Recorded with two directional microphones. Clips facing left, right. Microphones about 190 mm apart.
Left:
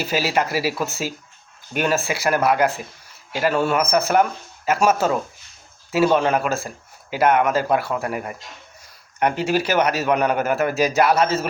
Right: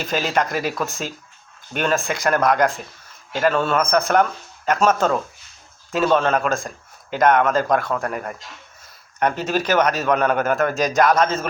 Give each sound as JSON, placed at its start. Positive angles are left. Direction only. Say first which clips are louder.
{"t": 0.0, "sound": "a man's voice", "louder": "even", "side_deg": 10}